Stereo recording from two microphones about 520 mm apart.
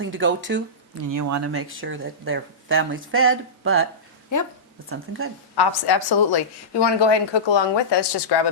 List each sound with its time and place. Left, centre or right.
0.0 s speech: right
0.9 s speech: right
4.3 s a woman's voice: left
4.9 s speech: right
5.5 s a woman's voice: left